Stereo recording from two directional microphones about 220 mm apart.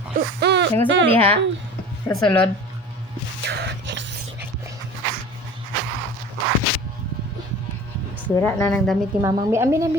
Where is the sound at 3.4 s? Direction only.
50° right (ahead or behind).